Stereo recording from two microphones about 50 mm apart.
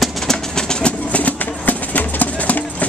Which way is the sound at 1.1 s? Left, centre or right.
Left.